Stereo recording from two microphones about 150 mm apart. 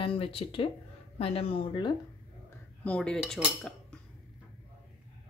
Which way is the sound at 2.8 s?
5° left (ahead or behind).